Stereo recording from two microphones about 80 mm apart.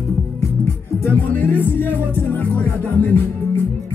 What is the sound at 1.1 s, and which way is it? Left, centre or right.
Music, left.